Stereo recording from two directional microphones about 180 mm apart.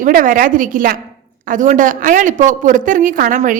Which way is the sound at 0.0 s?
50° right (ahead or behind).